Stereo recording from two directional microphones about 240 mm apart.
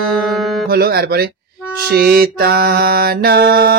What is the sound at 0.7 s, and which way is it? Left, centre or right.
Speech, right.